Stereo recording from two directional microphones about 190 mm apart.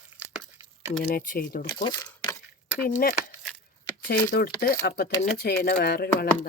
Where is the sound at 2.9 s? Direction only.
50° left (ahead or behind).